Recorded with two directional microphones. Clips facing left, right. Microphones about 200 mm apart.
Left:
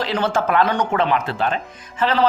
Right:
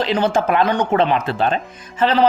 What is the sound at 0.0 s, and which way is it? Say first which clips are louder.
Speech: right 3 dB; 15° right (ahead or behind).